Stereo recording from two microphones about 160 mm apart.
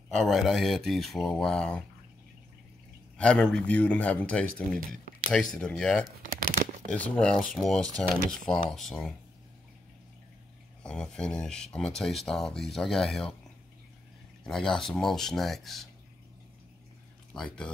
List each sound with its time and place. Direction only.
0.1 s speech: centre (ahead or behind)
3.2 s speech: 5° left (ahead or behind)
6.3 s a sound: 55° right (ahead or behind)
6.9 s speech: 5° left (ahead or behind)
10.8 s speech: 5° left (ahead or behind)
14.4 s speech: 5° left (ahead or behind)
17.3 s speech: 5° left (ahead or behind)